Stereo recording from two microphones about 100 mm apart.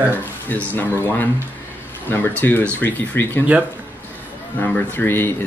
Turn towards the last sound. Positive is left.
turn(degrees=20)  # may be behind; listen again after turning